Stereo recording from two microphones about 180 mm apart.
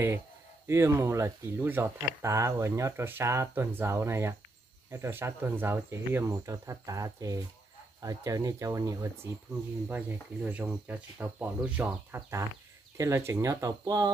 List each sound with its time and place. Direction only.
0.7 s speech: 15° right (ahead or behind)